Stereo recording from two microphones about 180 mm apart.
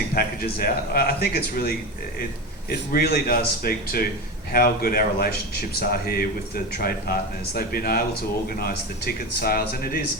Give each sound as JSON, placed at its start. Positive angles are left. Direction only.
{"t": 0.1, "sound": "speech", "side_deg": 55}
{"t": 6.7, "sound": "speech", "side_deg": 55}